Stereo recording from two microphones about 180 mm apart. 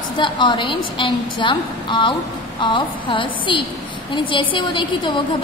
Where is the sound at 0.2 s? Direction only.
25° left (ahead or behind).